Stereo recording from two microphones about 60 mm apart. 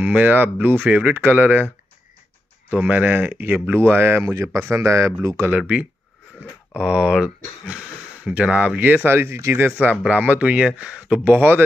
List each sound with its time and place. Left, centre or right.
0.0 s speech: right
2.9 s speech: right
4.6 s speech: right
5.5 s speech: right
9.7 s speech: right
11.2 s speech: right